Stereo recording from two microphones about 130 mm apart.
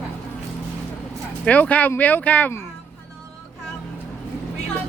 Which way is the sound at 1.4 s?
10° left (ahead or behind).